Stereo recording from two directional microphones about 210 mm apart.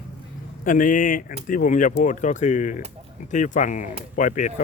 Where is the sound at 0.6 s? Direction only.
40° left (ahead or behind).